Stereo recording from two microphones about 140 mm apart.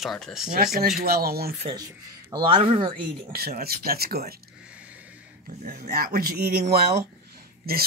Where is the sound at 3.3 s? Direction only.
90° right.